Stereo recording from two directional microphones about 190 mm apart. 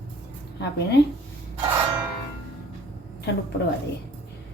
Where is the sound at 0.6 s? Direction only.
60° left (ahead or behind).